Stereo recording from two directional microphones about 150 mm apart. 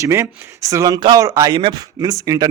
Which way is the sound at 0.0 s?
20° right (ahead or behind).